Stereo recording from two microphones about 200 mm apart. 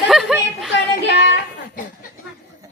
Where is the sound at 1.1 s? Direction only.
60° left (ahead or behind).